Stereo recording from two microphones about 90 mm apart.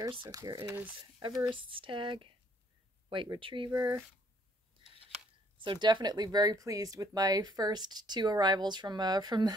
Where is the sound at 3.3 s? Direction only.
70° right (ahead or behind).